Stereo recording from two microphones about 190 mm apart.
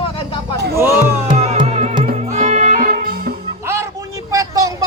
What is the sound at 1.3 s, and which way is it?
Music, 30° right (ahead or behind).